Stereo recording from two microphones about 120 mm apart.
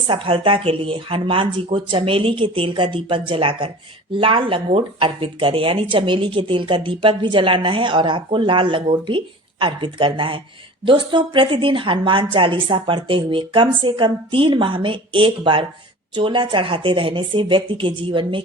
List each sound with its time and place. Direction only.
0.1 s speech: 45° right (ahead or behind)